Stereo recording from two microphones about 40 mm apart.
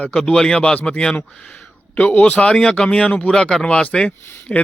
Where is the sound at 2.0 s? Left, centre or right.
Left.